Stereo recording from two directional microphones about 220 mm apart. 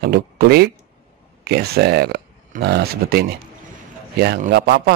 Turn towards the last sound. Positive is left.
turn(degrees=-45)  # may be behind; listen again after turning